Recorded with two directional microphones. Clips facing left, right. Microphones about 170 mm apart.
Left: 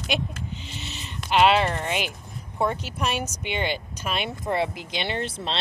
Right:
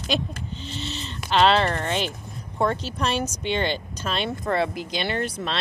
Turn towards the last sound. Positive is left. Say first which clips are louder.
# right 2 dB
turn(degrees=25)  # may be behind; listen again after turning